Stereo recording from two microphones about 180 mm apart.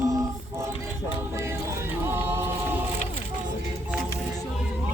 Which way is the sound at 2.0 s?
15° right (ahead or behind).